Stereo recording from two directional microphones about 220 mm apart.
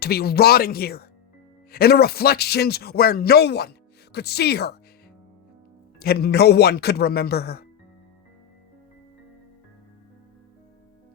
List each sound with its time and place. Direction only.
0.0 s a man's voice: 45° left (ahead or behind)
6.0 s a man's voice: 45° left (ahead or behind)